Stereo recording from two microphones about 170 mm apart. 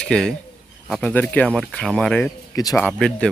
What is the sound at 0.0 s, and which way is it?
Speech, 5° left (ahead or behind).